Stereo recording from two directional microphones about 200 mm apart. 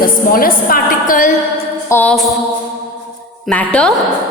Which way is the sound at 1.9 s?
10° left (ahead or behind).